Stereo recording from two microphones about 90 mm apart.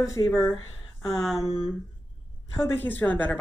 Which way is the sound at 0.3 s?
5° left (ahead or behind).